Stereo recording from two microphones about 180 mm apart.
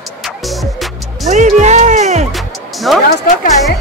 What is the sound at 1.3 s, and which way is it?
Music, 40° right (ahead or behind).